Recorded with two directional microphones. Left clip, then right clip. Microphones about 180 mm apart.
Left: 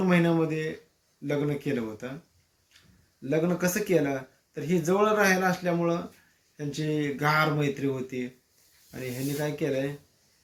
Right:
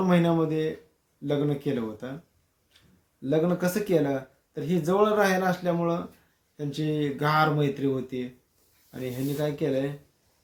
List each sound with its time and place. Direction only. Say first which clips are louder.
0.1 s speech: right 1 dB; 20° right (ahead or behind)
3.2 s speech: right 2 dB; 20° right (ahead or behind)